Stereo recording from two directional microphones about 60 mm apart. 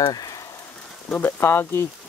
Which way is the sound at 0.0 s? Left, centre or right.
Left.